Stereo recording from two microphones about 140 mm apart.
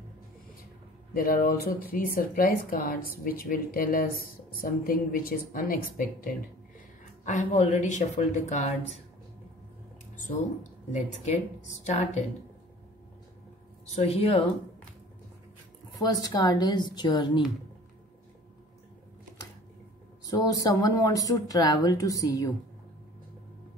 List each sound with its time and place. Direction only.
1.1 s speech: 85° left
7.2 s speech: 60° left (ahead or behind)
10.9 s speech: 55° left (ahead or behind)
13.8 s speech: 50° left (ahead or behind)
16.0 s speech: 25° left (ahead or behind)
20.2 s speech: 25° left (ahead or behind)